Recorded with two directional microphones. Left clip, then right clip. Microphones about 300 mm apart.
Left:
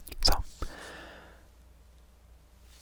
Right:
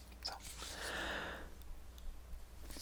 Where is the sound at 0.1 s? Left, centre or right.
Left.